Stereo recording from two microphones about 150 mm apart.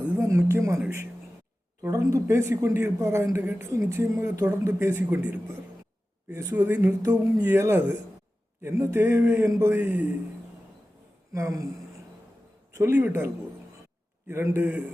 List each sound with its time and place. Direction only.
0.2 s speech: 20° right (ahead or behind)
1.8 s a man's voice: 20° right (ahead or behind)
11.3 s speech: 20° right (ahead or behind)
12.7 s a man's voice: 20° right (ahead or behind)